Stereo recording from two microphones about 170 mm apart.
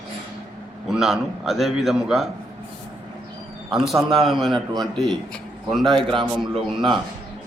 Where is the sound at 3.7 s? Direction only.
Centre (ahead or behind).